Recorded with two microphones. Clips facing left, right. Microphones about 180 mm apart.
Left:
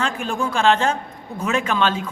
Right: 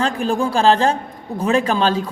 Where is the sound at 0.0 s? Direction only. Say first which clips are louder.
Right 5 dB; 35° right (ahead or behind).